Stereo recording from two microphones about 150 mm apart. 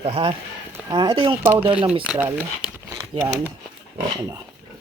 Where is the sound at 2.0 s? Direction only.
10° right (ahead or behind).